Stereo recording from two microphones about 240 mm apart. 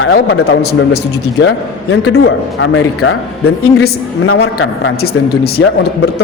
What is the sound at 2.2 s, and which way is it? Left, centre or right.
A man's voice, left.